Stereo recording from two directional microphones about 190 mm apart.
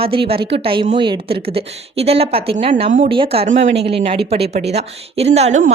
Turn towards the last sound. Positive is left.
turn(degrees=-35)  # may be behind; listen again after turning